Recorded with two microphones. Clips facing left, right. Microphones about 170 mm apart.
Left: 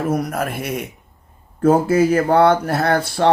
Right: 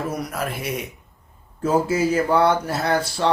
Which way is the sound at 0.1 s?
50° left (ahead or behind).